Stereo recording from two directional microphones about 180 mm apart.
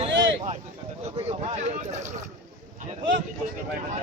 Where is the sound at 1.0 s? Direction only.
35° right (ahead or behind).